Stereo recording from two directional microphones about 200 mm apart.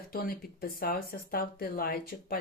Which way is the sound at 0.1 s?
45° left (ahead or behind).